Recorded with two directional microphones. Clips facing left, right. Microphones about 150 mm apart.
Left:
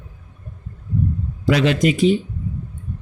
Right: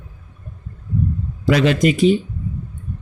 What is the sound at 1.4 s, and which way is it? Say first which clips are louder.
Speech: right 1 dB; 45° right (ahead or behind).